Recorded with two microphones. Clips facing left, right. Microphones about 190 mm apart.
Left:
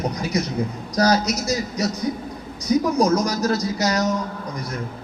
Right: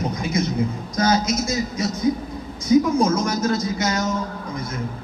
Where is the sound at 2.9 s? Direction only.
40° left (ahead or behind).